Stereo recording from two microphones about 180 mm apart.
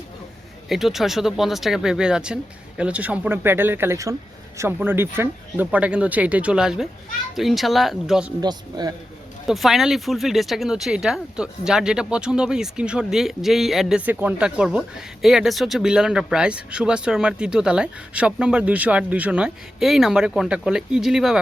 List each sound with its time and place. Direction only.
0.7 s speech: centre (ahead or behind)
8.4 s a man's voice: 20° right (ahead or behind)
9.5 s speech: centre (ahead or behind)